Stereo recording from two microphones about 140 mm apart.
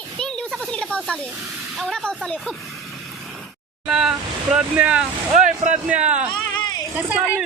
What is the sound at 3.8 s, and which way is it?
Speech, 5° right (ahead or behind).